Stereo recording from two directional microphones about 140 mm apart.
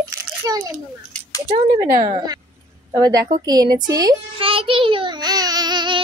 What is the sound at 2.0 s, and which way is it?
A child's voice, 30° right (ahead or behind).